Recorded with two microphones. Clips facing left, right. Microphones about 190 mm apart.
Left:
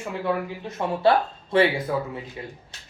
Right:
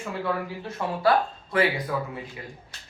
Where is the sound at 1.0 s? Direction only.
25° left (ahead or behind).